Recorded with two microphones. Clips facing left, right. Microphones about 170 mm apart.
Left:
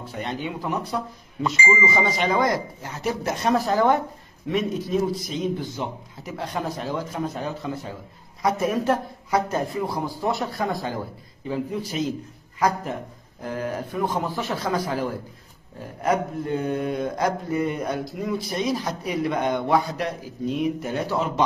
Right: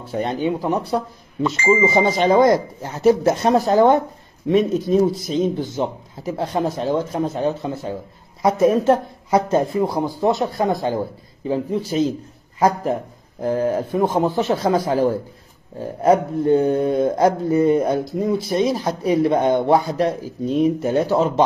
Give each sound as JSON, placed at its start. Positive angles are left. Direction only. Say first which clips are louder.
{"t": 0.1, "sound": "speech", "louder": "right 9 dB", "side_deg": -35}
{"t": 4.8, "sound": "speech", "louder": "right 7 dB", "side_deg": -30}